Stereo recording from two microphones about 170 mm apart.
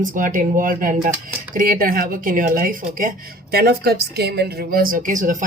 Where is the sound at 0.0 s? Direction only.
55° right (ahead or behind).